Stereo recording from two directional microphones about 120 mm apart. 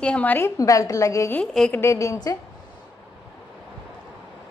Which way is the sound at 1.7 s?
25° left (ahead or behind).